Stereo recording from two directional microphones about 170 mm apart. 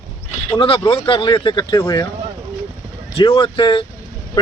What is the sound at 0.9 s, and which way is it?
Speech, 30° left (ahead or behind).